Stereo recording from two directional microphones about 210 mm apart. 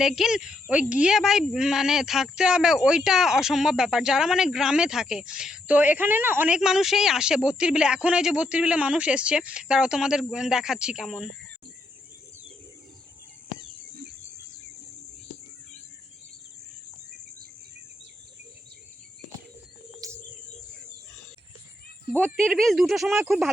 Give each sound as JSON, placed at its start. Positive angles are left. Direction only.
{"t": 0.0, "sound": "speech", "side_deg": 0}
{"t": 20.0, "sound": "bird", "side_deg": -15}
{"t": 22.4, "sound": "speech", "side_deg": 0}